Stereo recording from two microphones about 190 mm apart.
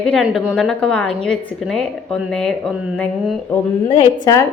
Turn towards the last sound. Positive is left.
turn(degrees=30)  # may be behind; listen again after turning